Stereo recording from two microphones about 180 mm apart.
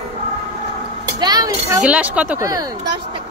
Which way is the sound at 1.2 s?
20° right (ahead or behind).